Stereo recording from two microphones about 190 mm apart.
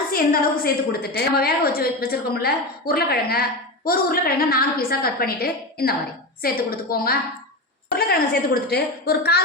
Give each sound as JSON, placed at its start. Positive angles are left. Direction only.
{"t": 0.1, "sound": "a woman's voice", "side_deg": 50}